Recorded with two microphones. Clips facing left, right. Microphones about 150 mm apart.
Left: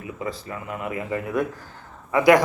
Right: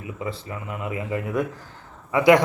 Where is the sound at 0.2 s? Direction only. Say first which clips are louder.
Even; 20° right (ahead or behind).